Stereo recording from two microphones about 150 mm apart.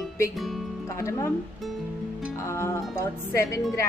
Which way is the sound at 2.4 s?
20° left (ahead or behind).